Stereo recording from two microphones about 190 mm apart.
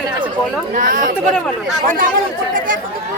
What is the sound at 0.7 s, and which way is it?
Speech, 45° right (ahead or behind).